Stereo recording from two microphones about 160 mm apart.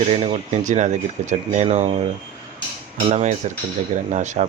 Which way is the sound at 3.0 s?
45° right (ahead or behind).